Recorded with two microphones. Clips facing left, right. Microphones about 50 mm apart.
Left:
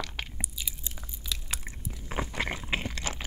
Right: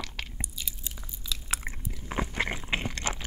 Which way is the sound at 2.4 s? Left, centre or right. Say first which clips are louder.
Right 1 dB; centre.